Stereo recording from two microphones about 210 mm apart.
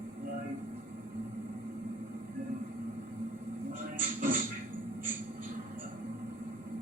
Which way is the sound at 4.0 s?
40° right (ahead or behind).